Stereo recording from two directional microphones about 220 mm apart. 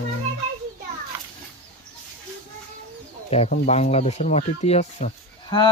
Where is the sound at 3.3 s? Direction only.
30° left (ahead or behind).